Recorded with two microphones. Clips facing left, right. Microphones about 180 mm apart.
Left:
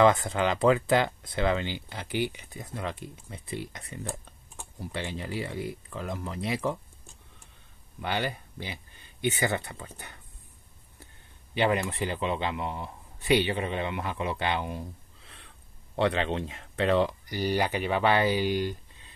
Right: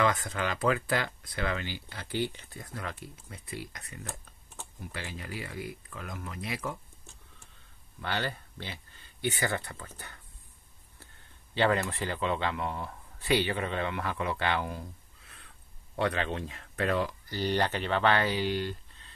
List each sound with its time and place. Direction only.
0.0 s speech: 25° left (ahead or behind)
4.0 s typing: 10° left (ahead or behind)
4.7 s speech: 25° left (ahead or behind)
8.0 s speech: 15° left (ahead or behind)
11.5 s a man's voice: 15° left (ahead or behind)
17.3 s speech: 10° left (ahead or behind)